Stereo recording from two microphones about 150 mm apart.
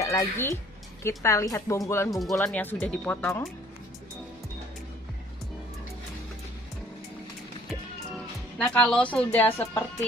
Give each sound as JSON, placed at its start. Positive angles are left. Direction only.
{"t": 0.0, "sound": "speech", "side_deg": 20}
{"t": 2.0, "sound": "speech", "side_deg": 0}
{"t": 8.5, "sound": "speech", "side_deg": 10}